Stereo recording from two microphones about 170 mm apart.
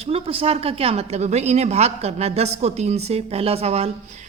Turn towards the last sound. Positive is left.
turn(degrees=-35)  # may be behind; listen again after turning